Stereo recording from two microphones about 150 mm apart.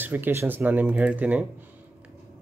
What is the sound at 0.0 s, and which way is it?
Speech, 15° right (ahead or behind).